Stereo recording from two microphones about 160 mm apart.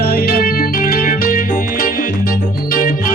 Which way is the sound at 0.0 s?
65° left (ahead or behind).